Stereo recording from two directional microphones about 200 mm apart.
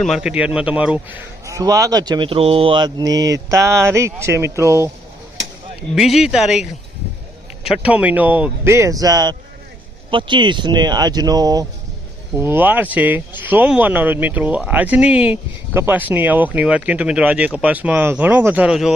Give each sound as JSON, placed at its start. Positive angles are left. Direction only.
{"t": 0.0, "sound": "speech", "side_deg": 0}
{"t": 1.5, "sound": "speech", "side_deg": -15}
{"t": 6.0, "sound": "speech", "side_deg": -5}